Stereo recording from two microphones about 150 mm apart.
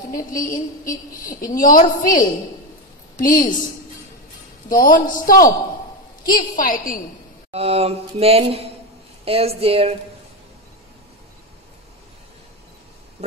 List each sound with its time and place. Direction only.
0.1 s a woman's voice: 65° left (ahead or behind)
4.6 s a man's voice: 65° left (ahead or behind)
7.5 s a sound: 45° right (ahead or behind)
9.2 s speech: 40° right (ahead or behind)